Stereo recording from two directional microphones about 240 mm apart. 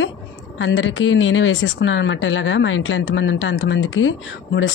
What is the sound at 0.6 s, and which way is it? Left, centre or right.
Speech, left.